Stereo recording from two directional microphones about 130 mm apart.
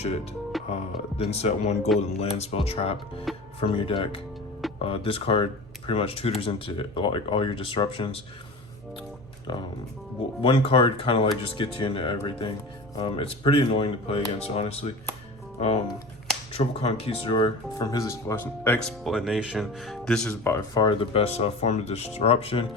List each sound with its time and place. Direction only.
0.5 s music: centre (ahead or behind)
1.2 s speech: 55° left (ahead or behind)
9.5 s speech: 40° left (ahead or behind)
17.3 s speech: 30° left (ahead or behind); by 18.8 s 15° left (ahead or behind)
18.8 s speech: 5° left (ahead or behind)
20.4 s speech: 20° left (ahead or behind)
20.7 s speech: 35° left (ahead or behind)